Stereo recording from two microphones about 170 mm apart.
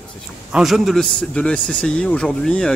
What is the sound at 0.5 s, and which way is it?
A man's voice, centre (ahead or behind).